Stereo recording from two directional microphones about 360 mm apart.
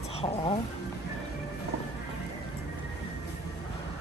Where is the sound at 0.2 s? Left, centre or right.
Centre.